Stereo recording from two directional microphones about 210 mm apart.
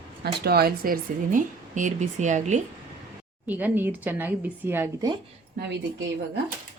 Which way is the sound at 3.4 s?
10° right (ahead or behind).